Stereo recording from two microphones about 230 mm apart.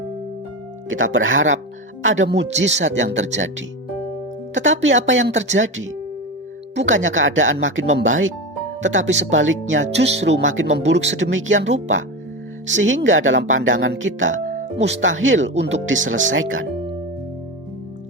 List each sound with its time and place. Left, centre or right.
0.9 s speech: right
4.5 s speech: right